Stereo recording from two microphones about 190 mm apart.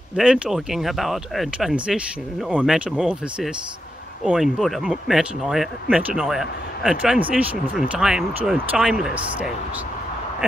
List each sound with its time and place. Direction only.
0.1 s speech: 5° right (ahead or behind)